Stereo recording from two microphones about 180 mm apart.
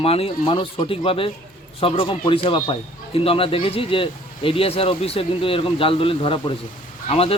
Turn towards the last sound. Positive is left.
turn(degrees=30)  # may be behind; listen again after turning